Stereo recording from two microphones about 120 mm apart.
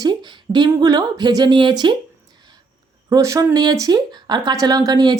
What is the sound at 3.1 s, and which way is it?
A woman's voice, 25° right (ahead or behind).